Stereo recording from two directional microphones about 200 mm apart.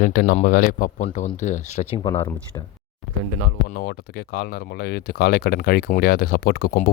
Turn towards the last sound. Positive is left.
turn(degrees=45)  # may be behind; listen again after turning